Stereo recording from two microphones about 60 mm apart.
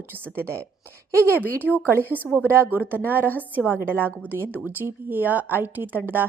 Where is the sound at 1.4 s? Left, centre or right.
Left.